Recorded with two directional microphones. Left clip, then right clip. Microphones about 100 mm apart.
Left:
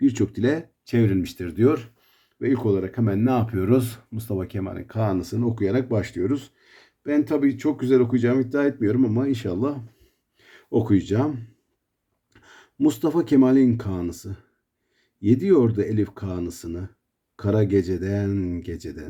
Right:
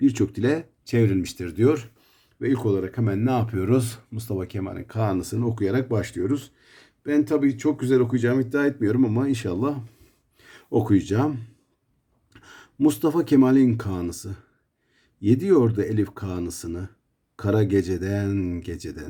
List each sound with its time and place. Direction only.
0.0 s speech: 20° right (ahead or behind)
8.8 s speech: 40° right (ahead or behind)